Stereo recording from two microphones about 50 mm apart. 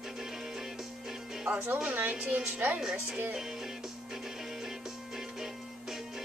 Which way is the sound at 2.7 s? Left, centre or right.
Centre.